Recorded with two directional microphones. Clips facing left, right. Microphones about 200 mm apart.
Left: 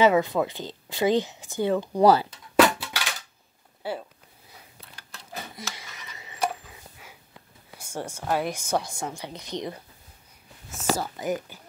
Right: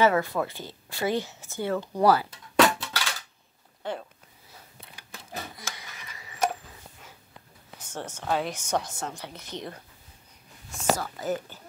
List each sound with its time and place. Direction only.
0.0 s speech: 15° left (ahead or behind)
2.5 s a sound: 10° left (ahead or behind)
3.8 s speech: 10° left (ahead or behind)
5.6 s a sound: 25° left (ahead or behind)
7.7 s speech: 10° left (ahead or behind)
11.0 s speech: 15° left (ahead or behind)